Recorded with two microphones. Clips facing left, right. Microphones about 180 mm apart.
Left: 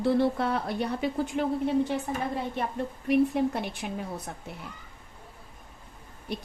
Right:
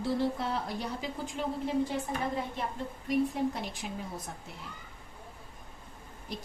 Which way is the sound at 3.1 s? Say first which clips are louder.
Left 5 dB; 65° left (ahead or behind).